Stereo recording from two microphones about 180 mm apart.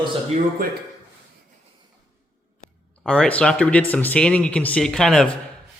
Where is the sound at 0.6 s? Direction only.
55° right (ahead or behind).